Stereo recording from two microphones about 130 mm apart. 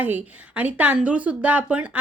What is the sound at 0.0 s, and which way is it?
A woman's voice, 10° right (ahead or behind).